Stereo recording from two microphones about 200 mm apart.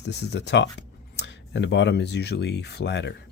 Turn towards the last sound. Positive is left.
turn(degrees=60)  # may be behind; listen again after turning